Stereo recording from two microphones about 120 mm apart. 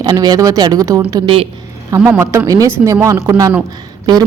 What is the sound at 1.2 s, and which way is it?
Speech, 50° right (ahead or behind).